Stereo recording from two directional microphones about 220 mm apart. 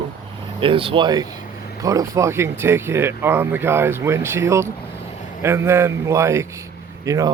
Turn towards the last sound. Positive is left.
turn(degrees=-15)  # may be behind; listen again after turning